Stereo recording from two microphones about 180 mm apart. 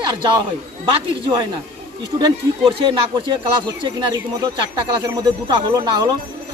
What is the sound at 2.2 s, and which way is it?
Speech, 30° right (ahead or behind).